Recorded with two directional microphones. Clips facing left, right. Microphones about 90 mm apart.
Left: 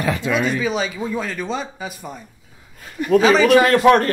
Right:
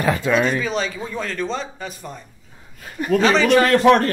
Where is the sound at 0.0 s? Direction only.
45° right (ahead or behind).